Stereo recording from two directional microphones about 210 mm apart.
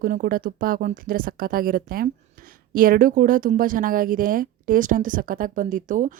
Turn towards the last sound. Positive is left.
turn(degrees=-40)  # may be behind; listen again after turning